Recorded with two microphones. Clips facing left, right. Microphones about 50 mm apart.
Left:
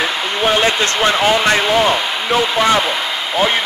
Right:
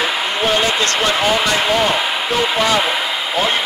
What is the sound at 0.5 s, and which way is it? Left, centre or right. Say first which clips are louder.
Basketball bounce: left 3 dB; centre.